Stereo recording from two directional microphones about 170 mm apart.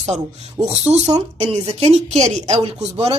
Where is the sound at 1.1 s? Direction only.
35° right (ahead or behind).